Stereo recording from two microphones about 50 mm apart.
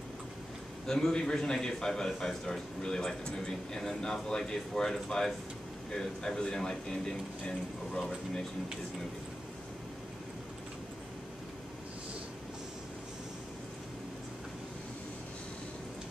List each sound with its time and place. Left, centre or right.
0.8 s speech: centre